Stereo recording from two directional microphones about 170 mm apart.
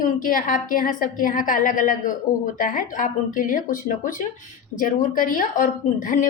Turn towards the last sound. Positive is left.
turn(degrees=50)  # may be behind; listen again after turning